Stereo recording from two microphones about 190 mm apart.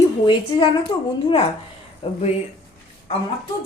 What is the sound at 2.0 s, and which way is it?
Speech, 25° left (ahead or behind).